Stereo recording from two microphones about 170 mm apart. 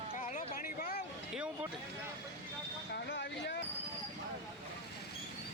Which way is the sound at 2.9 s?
90° left.